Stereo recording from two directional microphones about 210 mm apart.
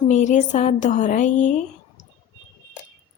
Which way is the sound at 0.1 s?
35° left (ahead or behind).